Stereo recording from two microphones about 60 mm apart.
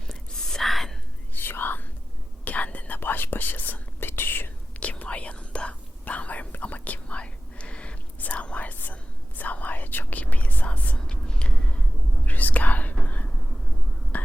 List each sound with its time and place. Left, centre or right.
0.1 s whispering: centre
1.3 s whispering: left
2.4 s whispering: left
4.8 s whispering: left
10.9 s whispering: centre
12.2 s whispering: left